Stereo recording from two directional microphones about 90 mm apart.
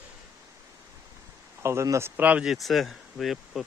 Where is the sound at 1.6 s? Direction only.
35° right (ahead or behind).